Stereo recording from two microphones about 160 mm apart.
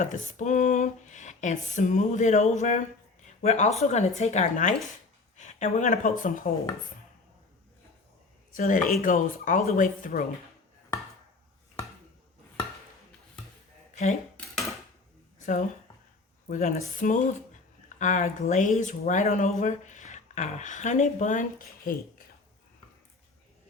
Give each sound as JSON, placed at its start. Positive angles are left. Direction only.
{"t": 0.0, "sound": "a woman's voice", "side_deg": 50}
{"t": 8.5, "sound": "speech", "side_deg": 55}
{"t": 15.4, "sound": "speech", "side_deg": 50}